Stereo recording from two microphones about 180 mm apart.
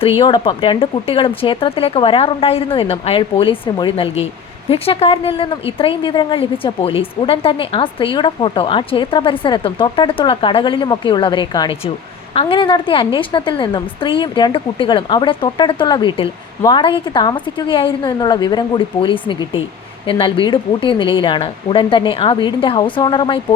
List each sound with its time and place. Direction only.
0.2 s a woman's voice: 25° left (ahead or behind)